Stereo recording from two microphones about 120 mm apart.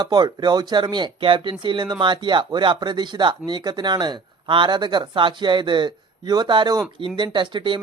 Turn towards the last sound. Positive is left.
turn(degrees=-40)  # may be behind; listen again after turning